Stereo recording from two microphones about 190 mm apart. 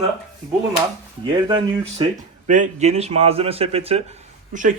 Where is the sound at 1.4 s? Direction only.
25° right (ahead or behind).